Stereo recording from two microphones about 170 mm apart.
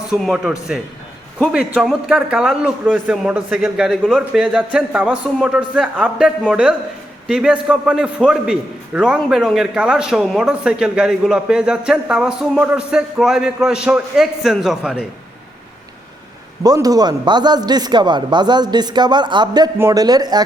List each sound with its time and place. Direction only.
0.1 s a man's voice: centre (ahead or behind)
16.6 s speech: 20° right (ahead or behind)